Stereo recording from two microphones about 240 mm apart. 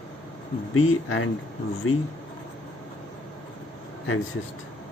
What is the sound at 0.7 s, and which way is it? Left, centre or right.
Speech, left.